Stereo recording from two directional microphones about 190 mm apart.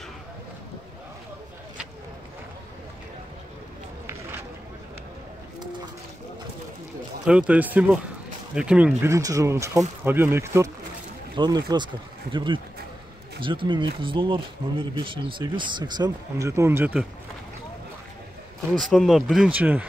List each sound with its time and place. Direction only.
7.2 s speech: 5° right (ahead or behind)
18.7 s speech: centre (ahead or behind)